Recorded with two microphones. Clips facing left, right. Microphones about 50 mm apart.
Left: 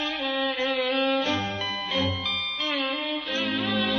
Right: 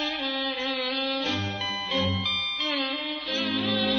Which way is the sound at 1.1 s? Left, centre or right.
Left.